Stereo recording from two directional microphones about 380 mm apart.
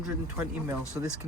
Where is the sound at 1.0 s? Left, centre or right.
Centre.